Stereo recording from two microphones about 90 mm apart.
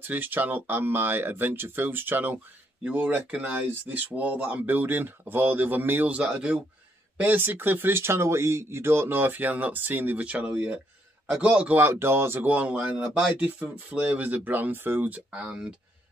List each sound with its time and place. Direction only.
0.0 s speech: 20° right (ahead or behind)
11.8 s speech: 25° right (ahead or behind); by 15.7 s 10° right (ahead or behind)